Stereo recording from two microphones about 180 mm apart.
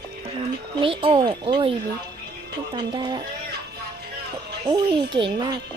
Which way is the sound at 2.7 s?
25° right (ahead or behind).